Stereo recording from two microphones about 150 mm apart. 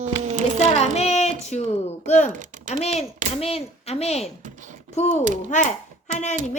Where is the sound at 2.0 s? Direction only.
50° left (ahead or behind).